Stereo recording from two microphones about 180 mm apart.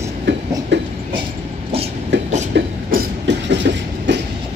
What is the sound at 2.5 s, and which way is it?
Train, 65° right (ahead or behind).